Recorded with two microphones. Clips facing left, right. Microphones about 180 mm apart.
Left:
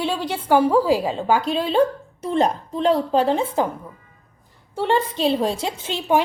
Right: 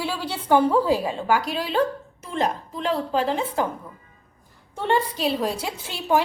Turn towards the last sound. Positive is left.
turn(degrees=20)  # may be behind; listen again after turning